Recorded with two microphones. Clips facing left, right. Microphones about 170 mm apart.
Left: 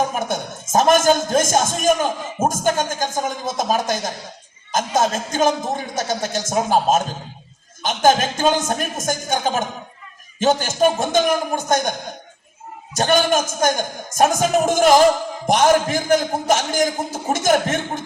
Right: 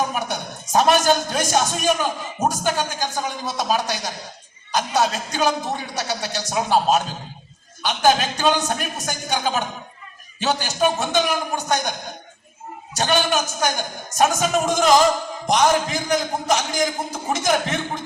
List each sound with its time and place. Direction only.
0.1 s a man's voice: 45° left (ahead or behind)
13.0 s a man's voice: 50° left (ahead or behind)